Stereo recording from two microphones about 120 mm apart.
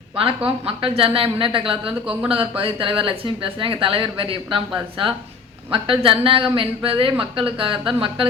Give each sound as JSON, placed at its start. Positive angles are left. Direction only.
{"t": 0.2, "sound": "speech", "side_deg": -50}